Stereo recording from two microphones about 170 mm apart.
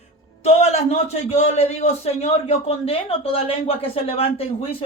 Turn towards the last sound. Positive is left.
turn(degrees=35)  # may be behind; listen again after turning